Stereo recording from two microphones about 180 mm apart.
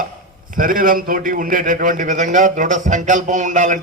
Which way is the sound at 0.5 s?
50° right (ahead or behind).